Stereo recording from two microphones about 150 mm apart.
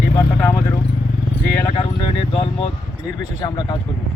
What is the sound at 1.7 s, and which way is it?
Speech, 40° left (ahead or behind).